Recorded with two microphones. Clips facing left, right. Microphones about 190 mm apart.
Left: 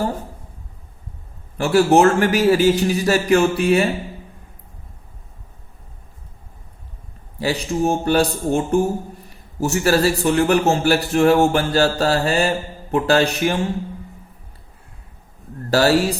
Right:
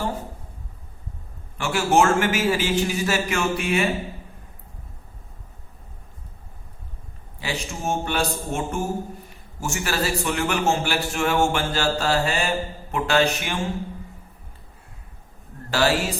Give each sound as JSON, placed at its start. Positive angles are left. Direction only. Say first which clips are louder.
{"t": 1.5, "sound": "a man's voice", "louder": "left 6 dB", "side_deg": 35}
{"t": 7.3, "sound": "a man's voice", "louder": "left 10 dB", "side_deg": 35}
{"t": 15.7, "sound": "a man's voice", "louder": "left 6 dB", "side_deg": 40}